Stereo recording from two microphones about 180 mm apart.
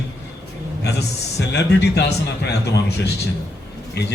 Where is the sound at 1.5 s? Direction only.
70° left (ahead or behind).